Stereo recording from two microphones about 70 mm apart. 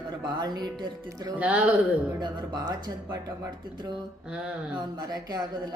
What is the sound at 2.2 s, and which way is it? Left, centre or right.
Speech, right.